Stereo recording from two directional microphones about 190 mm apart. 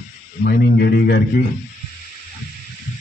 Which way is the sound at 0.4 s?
55° left (ahead or behind).